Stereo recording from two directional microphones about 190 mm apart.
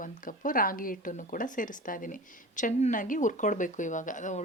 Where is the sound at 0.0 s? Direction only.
45° left (ahead or behind).